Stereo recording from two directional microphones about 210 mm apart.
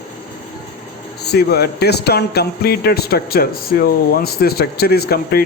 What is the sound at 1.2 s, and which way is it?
Speech, 50° left (ahead or behind).